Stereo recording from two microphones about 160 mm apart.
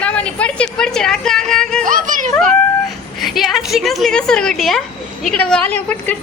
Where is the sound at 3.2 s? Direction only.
Centre (ahead or behind).